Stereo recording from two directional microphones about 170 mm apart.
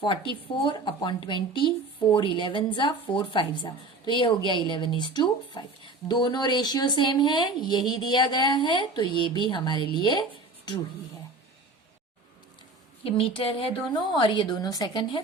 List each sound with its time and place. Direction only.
0.0 s a woman's voice: 30° left (ahead or behind)
13.1 s a woman's voice: 30° left (ahead or behind)